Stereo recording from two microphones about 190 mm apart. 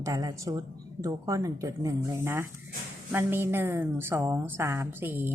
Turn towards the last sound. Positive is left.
turn(degrees=-10)  # may be behind; listen again after turning